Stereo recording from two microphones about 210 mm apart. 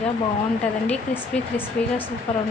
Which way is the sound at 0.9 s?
10° left (ahead or behind).